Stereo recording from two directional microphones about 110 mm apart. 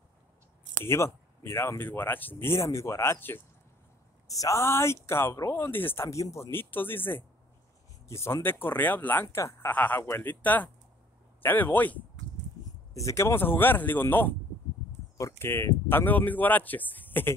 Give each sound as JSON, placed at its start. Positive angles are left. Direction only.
{"t": 0.8, "sound": "speech", "side_deg": 25}
{"t": 4.3, "sound": "speech", "side_deg": 30}
{"t": 12.9, "sound": "speech", "side_deg": 25}